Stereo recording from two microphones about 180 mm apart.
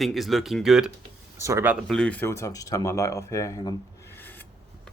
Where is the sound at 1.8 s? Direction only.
5° left (ahead or behind).